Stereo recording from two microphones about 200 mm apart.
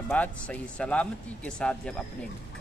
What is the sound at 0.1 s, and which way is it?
A man's voice, 5° left (ahead or behind).